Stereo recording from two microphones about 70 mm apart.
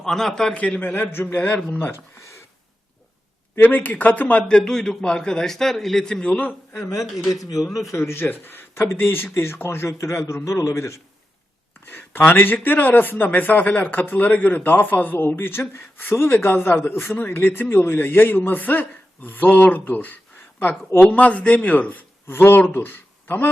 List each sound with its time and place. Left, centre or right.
0.0 s a man's voice: centre
0.5 s a man's voice: centre
3.6 s a man's voice: left
6.7 s a man's voice: left
7.0 s speech: centre
7.9 s a man's voice: left
11.9 s a man's voice: left